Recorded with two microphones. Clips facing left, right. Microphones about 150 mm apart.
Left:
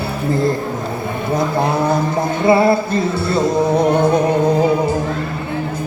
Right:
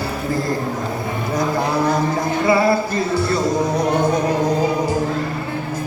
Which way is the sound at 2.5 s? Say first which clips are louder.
Left 4 dB; 25° left (ahead or behind).